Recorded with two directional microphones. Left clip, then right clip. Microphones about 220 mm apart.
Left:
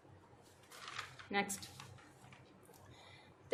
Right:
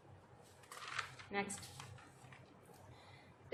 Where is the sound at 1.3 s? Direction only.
50° left (ahead or behind).